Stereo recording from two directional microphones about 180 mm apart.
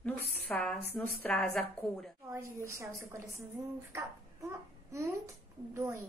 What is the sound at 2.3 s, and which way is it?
A woman's voice, 15° right (ahead or behind).